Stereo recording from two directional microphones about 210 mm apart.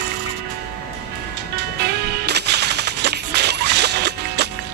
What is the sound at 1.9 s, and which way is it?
Music, 50° right (ahead or behind).